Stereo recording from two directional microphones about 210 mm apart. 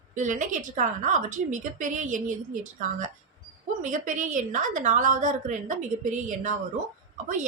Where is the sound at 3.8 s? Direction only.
35° right (ahead or behind).